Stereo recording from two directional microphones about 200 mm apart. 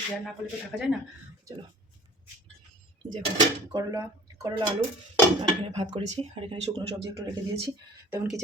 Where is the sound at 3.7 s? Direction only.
20° right (ahead or behind).